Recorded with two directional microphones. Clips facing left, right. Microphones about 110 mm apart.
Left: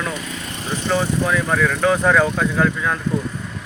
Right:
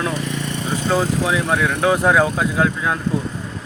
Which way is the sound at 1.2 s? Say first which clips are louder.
Even; 10° right (ahead or behind).